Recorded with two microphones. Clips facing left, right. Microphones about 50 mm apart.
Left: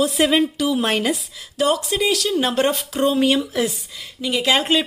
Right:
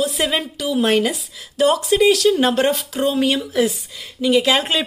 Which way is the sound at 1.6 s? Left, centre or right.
Centre.